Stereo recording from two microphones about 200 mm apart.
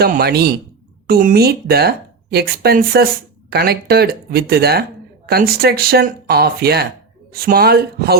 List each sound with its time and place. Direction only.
0.0 s speech: 50° right (ahead or behind)